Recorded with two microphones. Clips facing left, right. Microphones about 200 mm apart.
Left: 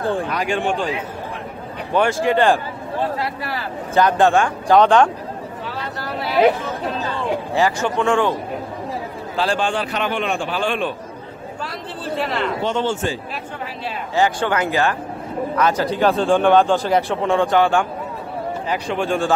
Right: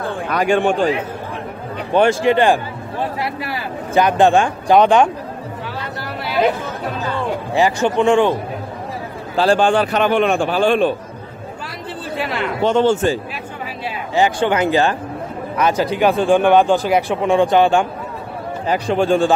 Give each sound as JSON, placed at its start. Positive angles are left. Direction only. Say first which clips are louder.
{"t": 0.3, "sound": "a man's voice", "louder": "right 5 dB", "side_deg": -55}
{"t": 2.0, "sound": "speech", "louder": "right 3 dB", "side_deg": -20}
{"t": 7.5, "sound": "speech", "louder": "right 5 dB", "side_deg": -20}
{"t": 9.4, "sound": "a man's voice", "louder": "right 7 dB", "side_deg": -45}
{"t": 12.2, "sound": "speech", "louder": "even", "side_deg": -5}
{"t": 12.6, "sound": "a man's voice", "louder": "right 10 dB", "side_deg": -45}
{"t": 14.1, "sound": "speech", "louder": "right 3 dB", "side_deg": -20}
{"t": 15.5, "sound": "speech", "louder": "right 2 dB", "side_deg": -15}
{"t": 18.7, "sound": "speech", "louder": "right 7 dB", "side_deg": -35}